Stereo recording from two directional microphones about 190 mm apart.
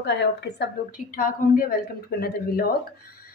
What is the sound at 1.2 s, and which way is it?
Speech, 45° left (ahead or behind).